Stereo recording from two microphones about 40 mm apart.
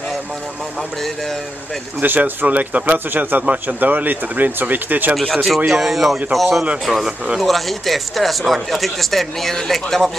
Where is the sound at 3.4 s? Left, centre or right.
Right.